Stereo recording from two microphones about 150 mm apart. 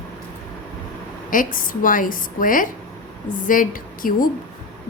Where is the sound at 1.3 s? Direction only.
65° left (ahead or behind).